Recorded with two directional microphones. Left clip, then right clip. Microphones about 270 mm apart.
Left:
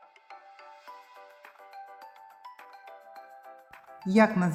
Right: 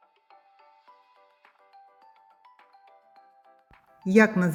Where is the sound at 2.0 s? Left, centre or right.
Left.